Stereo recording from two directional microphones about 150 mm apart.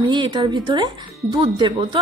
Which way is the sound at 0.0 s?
30° right (ahead or behind).